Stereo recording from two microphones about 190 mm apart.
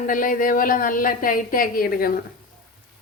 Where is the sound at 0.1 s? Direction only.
45° left (ahead or behind).